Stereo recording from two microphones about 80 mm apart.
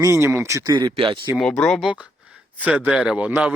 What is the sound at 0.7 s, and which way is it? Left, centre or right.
Speech, right.